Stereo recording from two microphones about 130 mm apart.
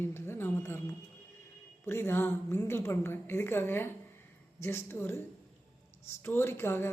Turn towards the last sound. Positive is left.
turn(degrees=15)  # may be behind; listen again after turning